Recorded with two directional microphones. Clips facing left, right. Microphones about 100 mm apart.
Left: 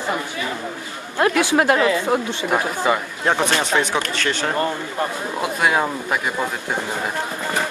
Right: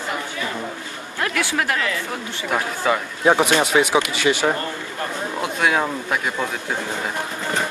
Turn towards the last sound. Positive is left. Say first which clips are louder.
# left 1 dB
turn(degrees=5)  # may be behind; listen again after turning